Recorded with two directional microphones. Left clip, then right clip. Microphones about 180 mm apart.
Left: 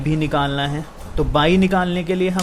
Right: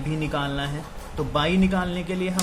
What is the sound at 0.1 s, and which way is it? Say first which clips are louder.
Speech: left 7 dB; 35° left (ahead or behind).